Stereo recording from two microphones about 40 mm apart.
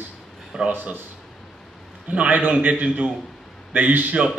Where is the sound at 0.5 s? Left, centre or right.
Centre.